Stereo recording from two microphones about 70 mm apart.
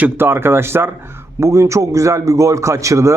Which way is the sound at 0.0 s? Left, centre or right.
Right.